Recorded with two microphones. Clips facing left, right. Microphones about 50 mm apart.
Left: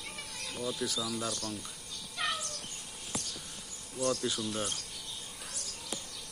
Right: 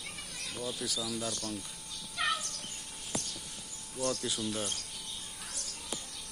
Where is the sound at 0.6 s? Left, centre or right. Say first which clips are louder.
Left 2 dB; left.